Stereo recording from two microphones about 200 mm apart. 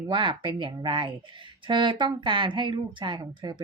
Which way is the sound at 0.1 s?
25° right (ahead or behind).